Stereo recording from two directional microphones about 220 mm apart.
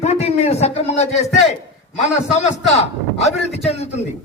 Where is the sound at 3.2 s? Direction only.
30° left (ahead or behind).